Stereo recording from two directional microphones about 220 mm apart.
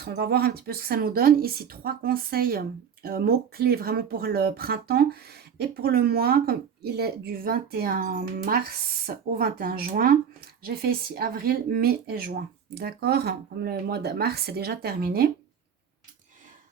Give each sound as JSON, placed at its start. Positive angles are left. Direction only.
{"t": 0.0, "sound": "speech", "side_deg": -45}